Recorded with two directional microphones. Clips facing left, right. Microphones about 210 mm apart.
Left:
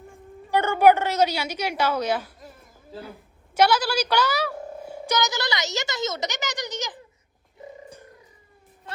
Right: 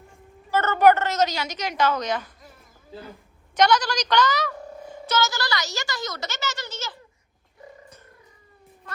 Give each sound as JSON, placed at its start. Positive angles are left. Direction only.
{"t": 0.5, "sound": "a woman's voice", "side_deg": 10}